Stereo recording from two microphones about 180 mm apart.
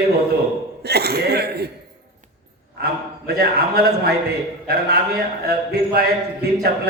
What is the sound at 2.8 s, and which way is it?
A man's voice, 55° right (ahead or behind).